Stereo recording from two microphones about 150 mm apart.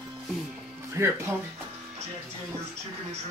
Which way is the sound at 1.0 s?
20° right (ahead or behind).